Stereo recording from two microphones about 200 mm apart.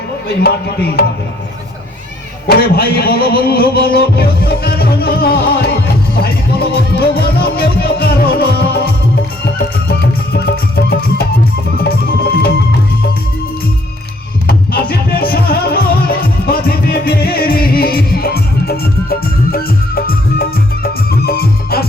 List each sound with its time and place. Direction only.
0.3 s speech: 50° left (ahead or behind)
2.5 s speech: 50° left (ahead or behind)
10.3 s music: 50° left (ahead or behind)
14.4 s music: 50° left (ahead or behind)
21.2 s music: 50° left (ahead or behind)